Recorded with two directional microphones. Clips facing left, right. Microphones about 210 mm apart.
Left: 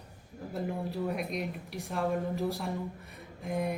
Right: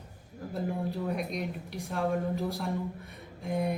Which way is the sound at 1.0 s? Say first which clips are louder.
Right 1 dB; 5° left (ahead or behind).